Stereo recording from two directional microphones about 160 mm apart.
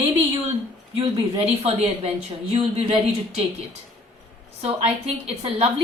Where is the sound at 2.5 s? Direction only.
35° right (ahead or behind).